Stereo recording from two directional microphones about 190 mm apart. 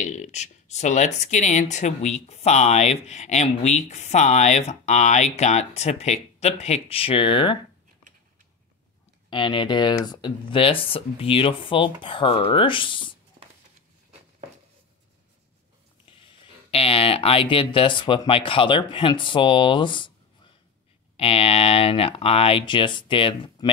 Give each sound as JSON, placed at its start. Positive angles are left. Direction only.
{"t": 0.0, "sound": "speech", "side_deg": 40}
{"t": 9.3, "sound": "speech", "side_deg": 25}
{"t": 16.7, "sound": "speech", "side_deg": 30}